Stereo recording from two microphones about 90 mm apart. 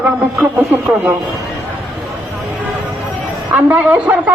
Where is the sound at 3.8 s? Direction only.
15° right (ahead or behind).